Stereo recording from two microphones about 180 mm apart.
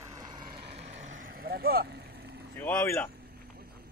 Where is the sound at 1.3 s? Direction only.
60° right (ahead or behind).